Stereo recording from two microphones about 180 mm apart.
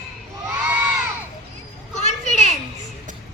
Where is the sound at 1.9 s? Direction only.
40° left (ahead or behind).